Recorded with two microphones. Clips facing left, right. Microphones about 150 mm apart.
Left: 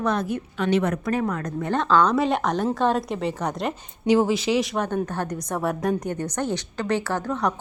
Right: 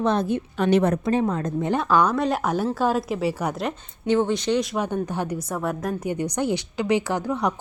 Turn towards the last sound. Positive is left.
turn(degrees=-10)  # may be behind; listen again after turning